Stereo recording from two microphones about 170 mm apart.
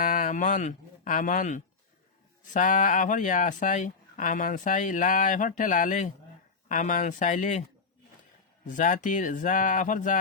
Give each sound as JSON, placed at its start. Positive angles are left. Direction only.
{"t": 0.0, "sound": "speech", "side_deg": 50}
{"t": 8.6, "sound": "speech", "side_deg": 50}